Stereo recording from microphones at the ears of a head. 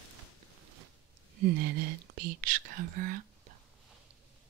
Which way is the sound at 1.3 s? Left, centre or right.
Right.